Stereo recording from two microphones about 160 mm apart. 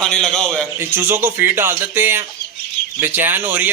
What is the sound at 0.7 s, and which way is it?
A man's voice, 15° right (ahead or behind).